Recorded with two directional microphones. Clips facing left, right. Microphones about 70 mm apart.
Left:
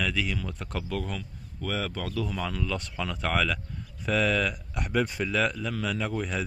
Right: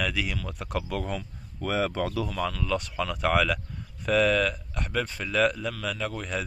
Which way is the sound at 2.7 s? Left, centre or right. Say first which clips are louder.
Right 4 dB; centre.